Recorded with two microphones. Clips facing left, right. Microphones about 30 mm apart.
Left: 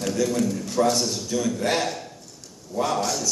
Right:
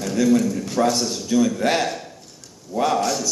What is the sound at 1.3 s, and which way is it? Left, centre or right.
Speech, right.